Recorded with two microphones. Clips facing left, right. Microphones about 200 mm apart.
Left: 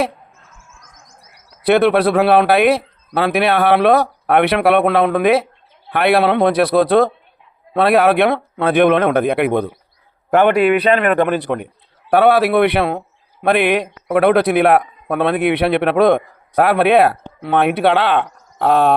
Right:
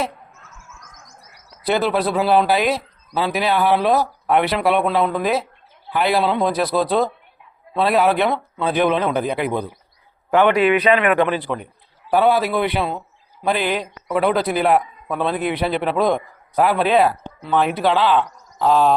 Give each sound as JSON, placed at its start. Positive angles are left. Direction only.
{"t": 0.5, "sound": "chirp", "side_deg": 30}
{"t": 1.6, "sound": "a man's voice", "side_deg": 65}
{"t": 10.8, "sound": "a man's voice", "side_deg": 35}
{"t": 11.4, "sound": "a man's voice", "side_deg": 65}